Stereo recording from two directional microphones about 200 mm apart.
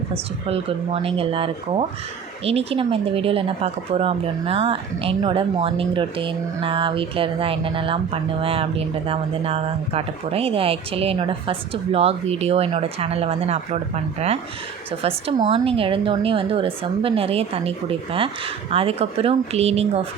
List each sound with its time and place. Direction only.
0.4 s a woman's voice: 30° right (ahead or behind)